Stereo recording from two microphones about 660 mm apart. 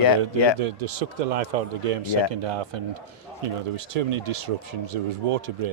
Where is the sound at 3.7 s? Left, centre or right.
Right.